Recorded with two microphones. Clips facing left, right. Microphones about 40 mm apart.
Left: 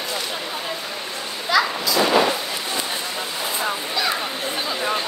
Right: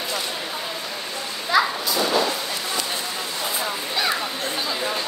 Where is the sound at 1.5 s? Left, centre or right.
Left.